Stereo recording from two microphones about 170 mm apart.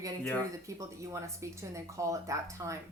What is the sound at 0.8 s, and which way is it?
Speech, 15° right (ahead or behind).